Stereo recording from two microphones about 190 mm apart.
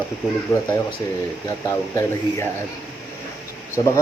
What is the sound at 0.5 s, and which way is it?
Speech, 15° left (ahead or behind).